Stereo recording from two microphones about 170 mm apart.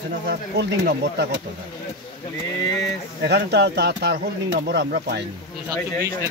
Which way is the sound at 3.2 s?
75° right (ahead or behind).